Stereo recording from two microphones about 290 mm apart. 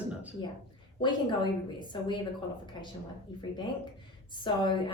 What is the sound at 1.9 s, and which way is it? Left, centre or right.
Speech, centre.